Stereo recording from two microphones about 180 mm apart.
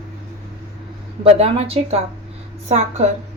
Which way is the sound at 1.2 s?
35° right (ahead or behind).